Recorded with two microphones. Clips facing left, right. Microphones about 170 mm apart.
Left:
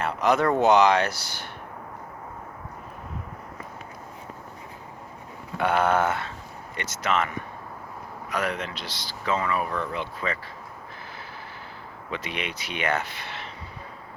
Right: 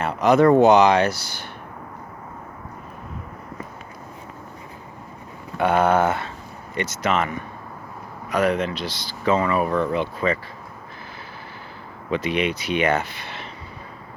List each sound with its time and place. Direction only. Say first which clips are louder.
0.0 s speech: right 6 dB; 5° right (ahead or behind)
5.6 s speech: right 4 dB; 10° right (ahead or behind)
8.3 s speech: right 8 dB; 20° right (ahead or behind)
12.1 s speech: right 10 dB; 10° right (ahead or behind)